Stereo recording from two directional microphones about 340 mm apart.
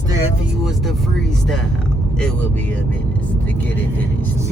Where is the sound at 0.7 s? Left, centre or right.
Centre.